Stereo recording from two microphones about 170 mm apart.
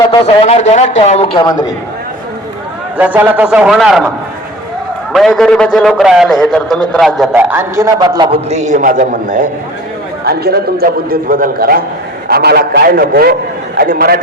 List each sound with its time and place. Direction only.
0.4 s a man's voice: 40° left (ahead or behind); by 1.6 s 25° left (ahead or behind)
3.0 s a man's voice: 10° right (ahead or behind)
5.1 s a man's voice: centre (ahead or behind)
7.3 s a man's voice: 15° right (ahead or behind)
8.4 s a man's voice: 40° right (ahead or behind)
10.2 s a man's voice: 65° right (ahead or behind)
12.3 s a man's voice: 70° right (ahead or behind)